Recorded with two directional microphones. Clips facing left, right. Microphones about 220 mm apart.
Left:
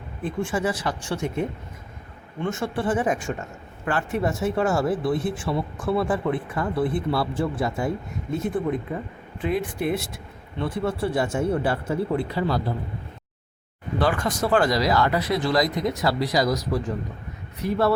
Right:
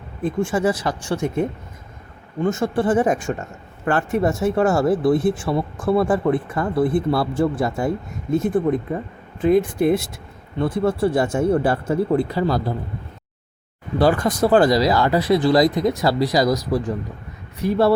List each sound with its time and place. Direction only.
0.2 s speech: 45° right (ahead or behind)
14.0 s speech: 35° right (ahead or behind)